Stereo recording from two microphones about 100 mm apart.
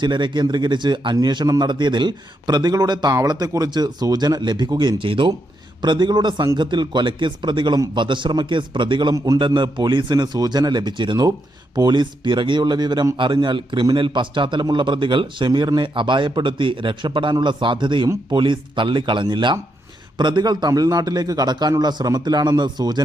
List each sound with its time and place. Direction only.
0.0 s a man's voice: 50° right (ahead or behind)
5.8 s a man's voice: 50° right (ahead or behind)
9.1 s a man's voice: 35° right (ahead or behind)
9.5 s a man's voice: 50° right (ahead or behind)
11.3 s a man's voice: 40° right (ahead or behind)